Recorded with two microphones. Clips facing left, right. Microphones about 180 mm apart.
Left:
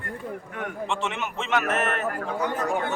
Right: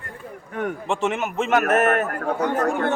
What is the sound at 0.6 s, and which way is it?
A man's voice, 45° right (ahead or behind).